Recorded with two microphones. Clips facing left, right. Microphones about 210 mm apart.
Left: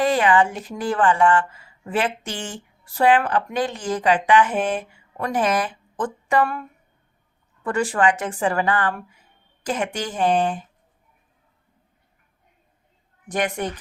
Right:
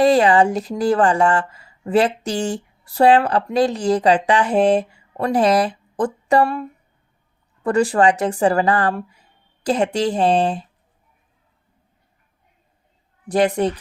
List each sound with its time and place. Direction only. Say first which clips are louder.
0.0 s speech: right 5 dB; 35° right (ahead or behind)
13.2 s a woman's voice: right 7 dB; 35° right (ahead or behind)